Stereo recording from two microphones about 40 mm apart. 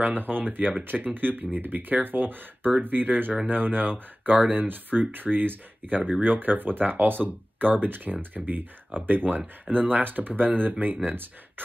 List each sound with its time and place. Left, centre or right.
0.0 s speech: right
9.7 s speech: centre
10.0 s speech: right